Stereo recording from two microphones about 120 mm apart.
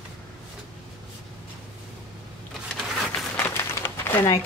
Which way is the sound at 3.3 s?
20° left (ahead or behind).